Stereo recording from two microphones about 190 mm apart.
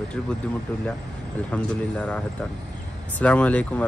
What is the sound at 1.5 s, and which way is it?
Speech, 5° left (ahead or behind).